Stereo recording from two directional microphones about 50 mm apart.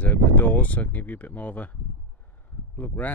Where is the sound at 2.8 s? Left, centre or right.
Left.